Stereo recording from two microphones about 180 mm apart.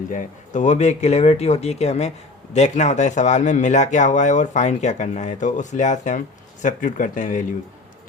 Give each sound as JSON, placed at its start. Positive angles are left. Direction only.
{"t": 0.1, "sound": "speech", "side_deg": 45}